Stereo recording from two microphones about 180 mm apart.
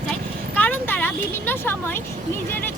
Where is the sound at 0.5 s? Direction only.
10° left (ahead or behind).